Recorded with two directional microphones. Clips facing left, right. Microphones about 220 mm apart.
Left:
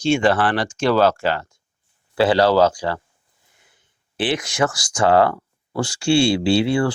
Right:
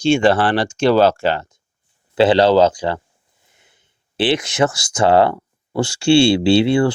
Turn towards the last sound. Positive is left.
turn(degrees=-25)  # may be behind; listen again after turning